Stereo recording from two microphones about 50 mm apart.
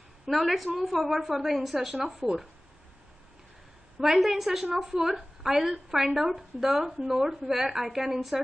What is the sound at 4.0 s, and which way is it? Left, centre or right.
A woman's voice, centre.